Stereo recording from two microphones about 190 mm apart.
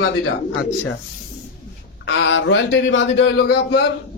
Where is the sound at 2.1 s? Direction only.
85° left; by 3.8 s 65° left (ahead or behind).